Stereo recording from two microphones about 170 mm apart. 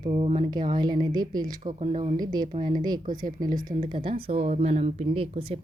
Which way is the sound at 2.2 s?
25° right (ahead or behind).